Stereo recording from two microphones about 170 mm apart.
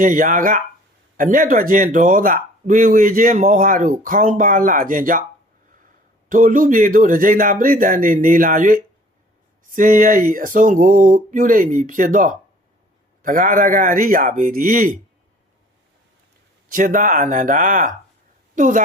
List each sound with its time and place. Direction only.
0.0 s speech: 50° right (ahead or behind)
6.2 s speech: 50° right (ahead or behind)
16.7 s speech: 50° right (ahead or behind)